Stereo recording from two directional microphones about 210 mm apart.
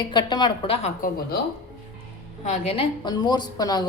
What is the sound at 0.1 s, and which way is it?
A woman's voice, 20° left (ahead or behind).